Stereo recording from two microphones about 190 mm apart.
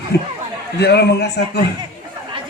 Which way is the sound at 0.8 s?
60° left (ahead or behind).